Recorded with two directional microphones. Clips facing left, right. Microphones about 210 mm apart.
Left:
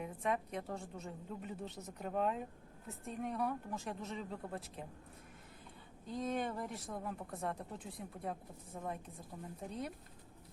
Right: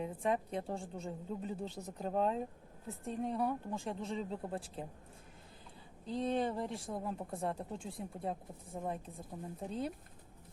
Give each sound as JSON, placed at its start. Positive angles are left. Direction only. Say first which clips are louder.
{"t": 0.0, "sound": "a woman's voice", "louder": "right 3 dB", "side_deg": -30}
{"t": 6.1, "sound": "a woman's voice", "louder": "right 4 dB", "side_deg": -30}